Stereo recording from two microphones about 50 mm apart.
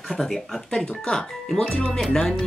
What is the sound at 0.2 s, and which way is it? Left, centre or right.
Speech, centre.